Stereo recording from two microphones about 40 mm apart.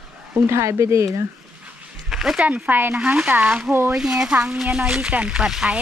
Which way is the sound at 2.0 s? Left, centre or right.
Centre.